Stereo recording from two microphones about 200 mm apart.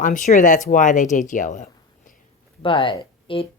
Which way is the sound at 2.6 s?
25° left (ahead or behind).